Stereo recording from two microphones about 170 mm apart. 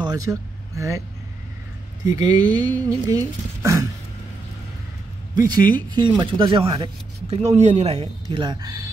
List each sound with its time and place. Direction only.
0.0 s vehicle: 20° right (ahead or behind)
2.0 s speech: 25° right (ahead or behind)
5.3 s speech: 25° right (ahead or behind)